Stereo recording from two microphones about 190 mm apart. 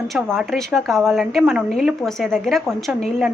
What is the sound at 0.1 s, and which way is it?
A woman's voice, centre (ahead or behind).